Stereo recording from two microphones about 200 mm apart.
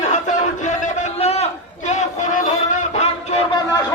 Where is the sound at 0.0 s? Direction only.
40° left (ahead or behind).